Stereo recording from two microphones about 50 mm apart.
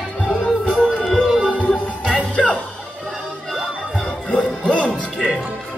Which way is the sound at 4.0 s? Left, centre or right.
Left.